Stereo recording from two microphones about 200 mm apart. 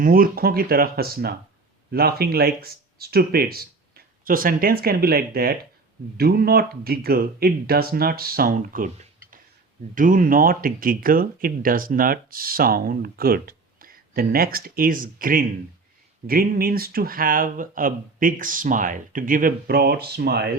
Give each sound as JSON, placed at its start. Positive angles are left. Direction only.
{"t": 0.0, "sound": "speech", "side_deg": -45}
{"t": 9.9, "sound": "speech", "side_deg": -40}